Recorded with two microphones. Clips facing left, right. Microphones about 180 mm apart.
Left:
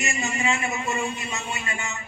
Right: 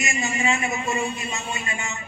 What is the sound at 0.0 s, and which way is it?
A man's voice, 15° right (ahead or behind).